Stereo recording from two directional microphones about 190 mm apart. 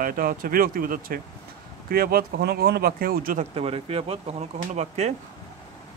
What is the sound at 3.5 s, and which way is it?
Speech, 30° right (ahead or behind).